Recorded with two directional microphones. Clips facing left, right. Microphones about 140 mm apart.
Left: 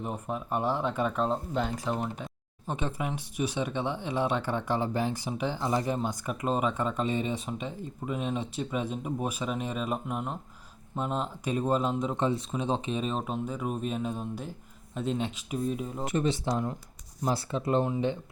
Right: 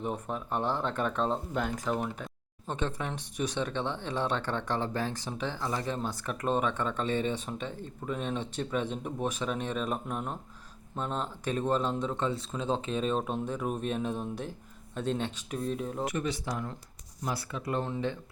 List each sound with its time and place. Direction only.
0.0 s speech: 5° left (ahead or behind)
12.7 s speech: 5° left (ahead or behind)
16.0 s speech: 30° left (ahead or behind)